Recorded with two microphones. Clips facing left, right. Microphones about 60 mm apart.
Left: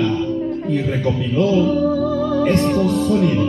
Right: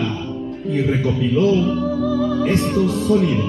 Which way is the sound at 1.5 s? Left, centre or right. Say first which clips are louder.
Left 2 dB; centre.